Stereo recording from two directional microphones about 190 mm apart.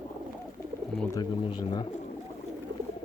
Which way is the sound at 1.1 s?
25° left (ahead or behind).